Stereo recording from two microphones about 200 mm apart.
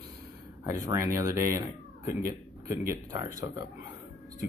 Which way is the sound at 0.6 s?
15° right (ahead or behind).